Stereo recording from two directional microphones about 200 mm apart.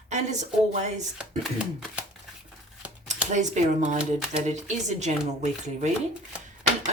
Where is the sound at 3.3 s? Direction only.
35° right (ahead or behind).